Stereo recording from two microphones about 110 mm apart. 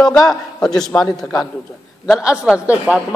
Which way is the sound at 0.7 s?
5° left (ahead or behind).